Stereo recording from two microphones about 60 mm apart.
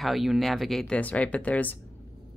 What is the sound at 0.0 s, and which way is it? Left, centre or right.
Speech, centre.